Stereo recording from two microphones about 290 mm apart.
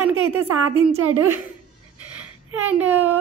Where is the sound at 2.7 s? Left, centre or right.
Centre.